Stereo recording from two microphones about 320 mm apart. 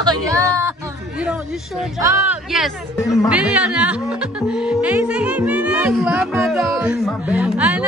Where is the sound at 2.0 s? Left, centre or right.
Centre.